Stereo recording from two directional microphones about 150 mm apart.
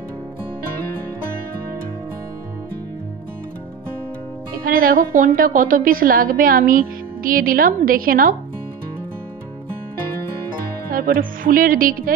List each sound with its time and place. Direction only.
4.6 s a woman's voice: 70° right (ahead or behind)
10.9 s music: 75° right (ahead or behind)